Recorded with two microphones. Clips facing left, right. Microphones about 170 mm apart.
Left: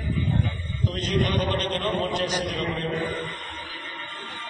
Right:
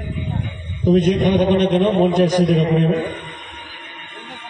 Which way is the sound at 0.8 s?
55° right (ahead or behind).